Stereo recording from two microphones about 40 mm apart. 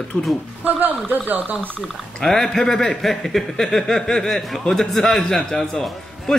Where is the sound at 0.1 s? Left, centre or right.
Left.